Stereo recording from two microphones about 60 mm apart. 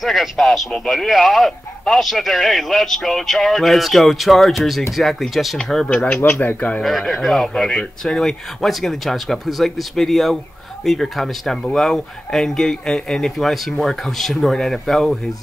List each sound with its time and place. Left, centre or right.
0.0 s speech: centre
6.4 s speech: left
6.8 s speech: centre